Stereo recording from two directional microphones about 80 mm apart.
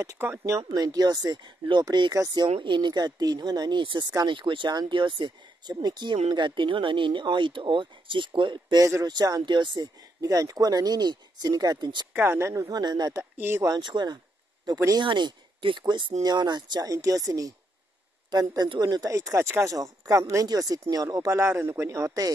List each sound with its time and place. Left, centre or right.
0.2 s speech: right
0.6 s speech: right
2.1 s speech: right
2.4 s speech: right
9.0 s speech: right
10.2 s speech: right
12.1 s speech: right
13.2 s speech: right
13.7 s speech: right
16.2 s speech: right
16.8 s speech: right
20.4 s speech: right